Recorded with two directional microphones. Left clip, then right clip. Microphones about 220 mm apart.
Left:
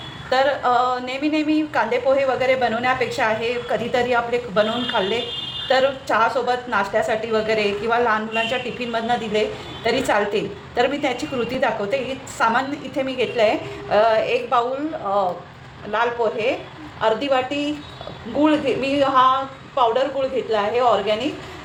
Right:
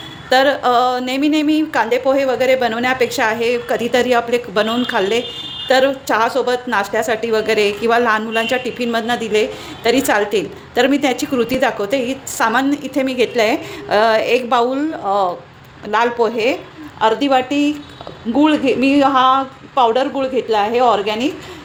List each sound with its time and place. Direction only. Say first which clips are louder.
0.3 s a woman's voice: right 5 dB; 50° right (ahead or behind)